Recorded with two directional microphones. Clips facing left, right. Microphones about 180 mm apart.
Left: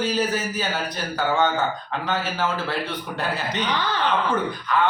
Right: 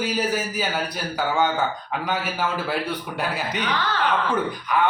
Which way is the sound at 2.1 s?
15° right (ahead or behind).